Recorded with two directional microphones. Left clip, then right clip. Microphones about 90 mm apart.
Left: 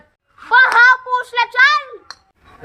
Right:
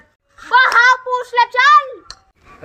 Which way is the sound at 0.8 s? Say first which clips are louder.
Left 1 dB; 30° left (ahead or behind).